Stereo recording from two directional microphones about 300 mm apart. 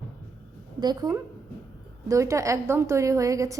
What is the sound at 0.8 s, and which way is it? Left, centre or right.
A woman's voice, centre.